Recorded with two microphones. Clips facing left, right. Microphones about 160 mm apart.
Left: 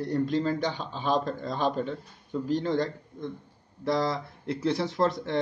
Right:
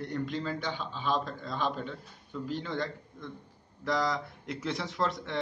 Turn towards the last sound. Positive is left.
turn(degrees=35)  # may be behind; listen again after turning